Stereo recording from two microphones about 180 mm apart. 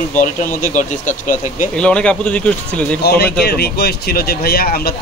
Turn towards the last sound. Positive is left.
turn(degrees=55)  # may be behind; listen again after turning